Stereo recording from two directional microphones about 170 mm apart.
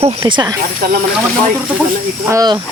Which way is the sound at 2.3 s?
20° right (ahead or behind).